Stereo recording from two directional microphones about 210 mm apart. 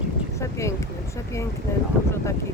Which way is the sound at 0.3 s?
15° left (ahead or behind).